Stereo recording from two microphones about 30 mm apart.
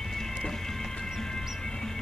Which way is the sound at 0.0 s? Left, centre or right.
Centre.